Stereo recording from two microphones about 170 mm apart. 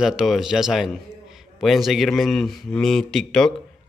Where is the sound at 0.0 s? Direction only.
5° right (ahead or behind).